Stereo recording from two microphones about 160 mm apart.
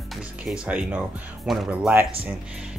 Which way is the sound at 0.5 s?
10° right (ahead or behind).